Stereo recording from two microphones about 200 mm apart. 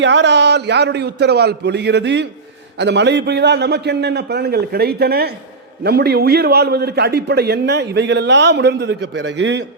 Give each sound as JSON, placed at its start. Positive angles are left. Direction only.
{"t": 0.0, "sound": "a man's voice", "side_deg": -60}